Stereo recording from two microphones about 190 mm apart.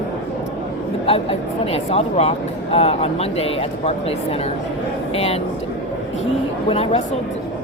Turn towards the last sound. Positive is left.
turn(degrees=30)  # may be behind; listen again after turning